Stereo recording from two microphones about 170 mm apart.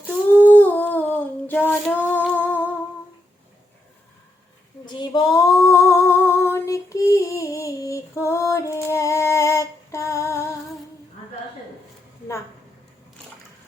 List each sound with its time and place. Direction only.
0.3 s child singing: 10° left (ahead or behind)
2.3 s humming: 10° left (ahead or behind)
4.9 s female singing: 25° left (ahead or behind)